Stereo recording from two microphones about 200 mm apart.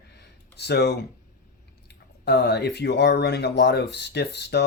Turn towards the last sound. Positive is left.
turn(degrees=55)  # may be behind; listen again after turning